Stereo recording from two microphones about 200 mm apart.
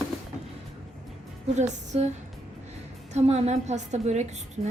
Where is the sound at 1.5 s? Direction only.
35° right (ahead or behind).